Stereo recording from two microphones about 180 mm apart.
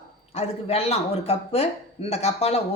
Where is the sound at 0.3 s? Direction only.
35° left (ahead or behind).